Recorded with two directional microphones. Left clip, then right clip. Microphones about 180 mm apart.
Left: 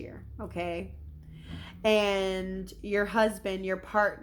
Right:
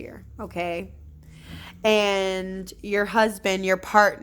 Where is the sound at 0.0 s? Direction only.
40° right (ahead or behind).